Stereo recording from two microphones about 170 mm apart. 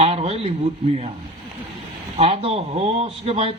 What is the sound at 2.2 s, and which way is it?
A man's voice, 35° right (ahead or behind).